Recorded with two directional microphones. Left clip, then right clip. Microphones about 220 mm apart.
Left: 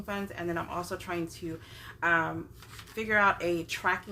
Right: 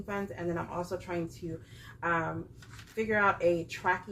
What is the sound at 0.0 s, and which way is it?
Speech, 35° left (ahead or behind).